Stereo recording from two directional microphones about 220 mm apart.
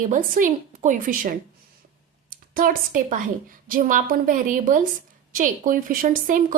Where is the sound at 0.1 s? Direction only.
35° right (ahead or behind).